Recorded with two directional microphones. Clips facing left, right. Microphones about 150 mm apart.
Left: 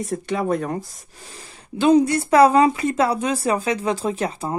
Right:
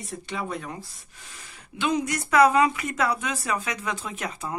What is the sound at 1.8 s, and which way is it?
Speech, 35° left (ahead or behind).